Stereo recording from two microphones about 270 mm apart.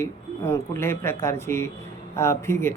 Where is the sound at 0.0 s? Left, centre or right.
Centre.